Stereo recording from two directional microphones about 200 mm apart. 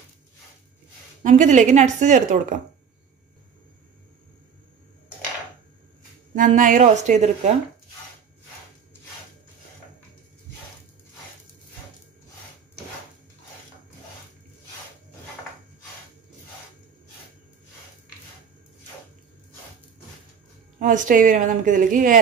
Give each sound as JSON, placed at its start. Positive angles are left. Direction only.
{"t": 1.2, "sound": "a woman's voice", "side_deg": -40}
{"t": 6.3, "sound": "a woman's voice", "side_deg": -40}
{"t": 20.8, "sound": "a woman's voice", "side_deg": -40}